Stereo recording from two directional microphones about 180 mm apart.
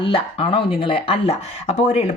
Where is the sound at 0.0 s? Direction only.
30° left (ahead or behind).